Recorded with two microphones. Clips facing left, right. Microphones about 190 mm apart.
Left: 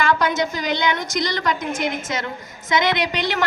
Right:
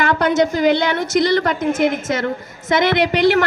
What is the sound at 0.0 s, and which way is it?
A woman's voice, 60° right (ahead or behind).